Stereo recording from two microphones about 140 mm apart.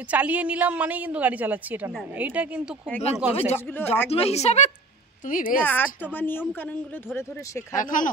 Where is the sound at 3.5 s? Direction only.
15° left (ahead or behind).